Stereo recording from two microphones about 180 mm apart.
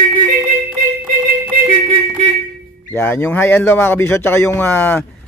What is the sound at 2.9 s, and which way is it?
A man's voice, 10° left (ahead or behind).